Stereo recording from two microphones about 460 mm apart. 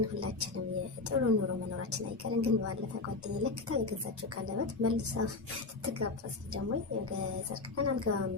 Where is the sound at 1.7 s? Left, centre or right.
Right.